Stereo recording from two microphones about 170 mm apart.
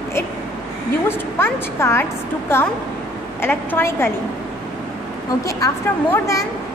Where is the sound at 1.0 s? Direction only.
15° left (ahead or behind).